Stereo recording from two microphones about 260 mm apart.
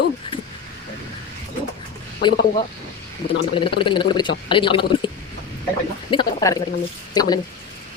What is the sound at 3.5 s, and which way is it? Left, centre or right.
Speech, centre.